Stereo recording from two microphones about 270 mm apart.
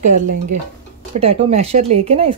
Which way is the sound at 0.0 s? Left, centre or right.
Right.